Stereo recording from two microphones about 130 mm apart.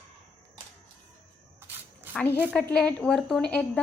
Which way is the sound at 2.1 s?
15° left (ahead or behind).